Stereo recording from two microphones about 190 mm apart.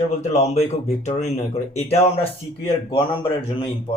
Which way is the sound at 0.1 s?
35° left (ahead or behind).